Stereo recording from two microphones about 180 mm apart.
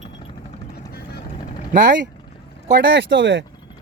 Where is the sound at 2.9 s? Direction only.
85° right.